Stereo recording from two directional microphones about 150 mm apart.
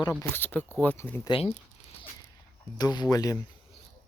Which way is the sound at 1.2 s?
40° left (ahead or behind).